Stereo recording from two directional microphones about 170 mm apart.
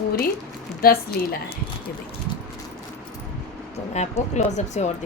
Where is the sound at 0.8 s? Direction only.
60° left (ahead or behind).